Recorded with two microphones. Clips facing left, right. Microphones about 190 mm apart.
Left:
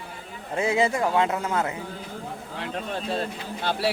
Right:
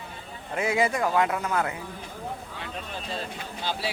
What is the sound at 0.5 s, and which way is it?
Speech, 25° left (ahead or behind).